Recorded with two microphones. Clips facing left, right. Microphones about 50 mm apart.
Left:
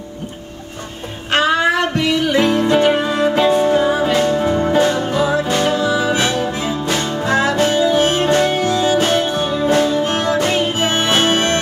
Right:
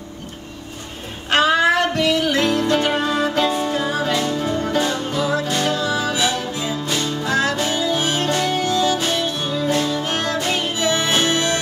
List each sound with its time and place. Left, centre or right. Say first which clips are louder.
1.3 s music: left 1 dB; centre
6.3 s music: left 5 dB; left
6.9 s music: left 4 dB; left
8.9 s music: left 6 dB; left
10.7 s music: left 3 dB; left